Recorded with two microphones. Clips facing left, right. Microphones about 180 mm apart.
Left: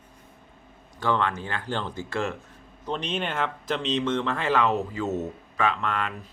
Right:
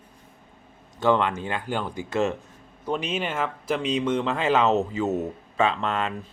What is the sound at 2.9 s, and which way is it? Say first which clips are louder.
Speech: right 2 dB; 5° right (ahead or behind).